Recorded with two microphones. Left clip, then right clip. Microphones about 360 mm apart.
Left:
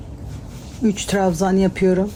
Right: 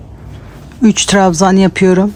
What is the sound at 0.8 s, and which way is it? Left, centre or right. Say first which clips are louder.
Speech: right 9 dB; right.